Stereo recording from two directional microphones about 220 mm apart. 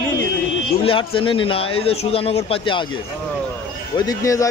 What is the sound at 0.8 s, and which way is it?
A man's voice, 25° left (ahead or behind).